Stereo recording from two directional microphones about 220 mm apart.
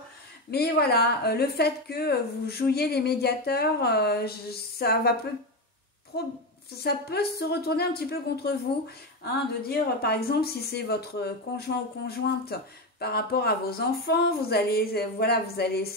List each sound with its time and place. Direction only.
0.5 s speech: 45° left (ahead or behind)
6.1 s speech: 45° left (ahead or behind)
13.0 s speech: 45° left (ahead or behind)